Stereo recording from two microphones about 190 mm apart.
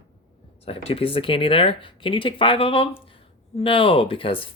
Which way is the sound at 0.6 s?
30° left (ahead or behind).